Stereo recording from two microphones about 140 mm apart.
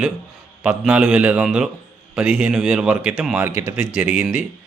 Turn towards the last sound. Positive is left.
turn(degrees=-10)  # may be behind; listen again after turning